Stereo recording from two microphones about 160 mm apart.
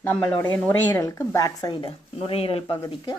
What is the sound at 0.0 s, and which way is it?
Speech, 10° left (ahead or behind).